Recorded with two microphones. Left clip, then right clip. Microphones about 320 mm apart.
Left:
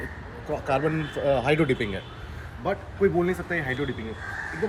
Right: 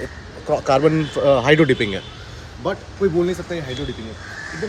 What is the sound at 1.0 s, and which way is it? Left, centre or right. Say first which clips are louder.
Speech: right 8 dB; right.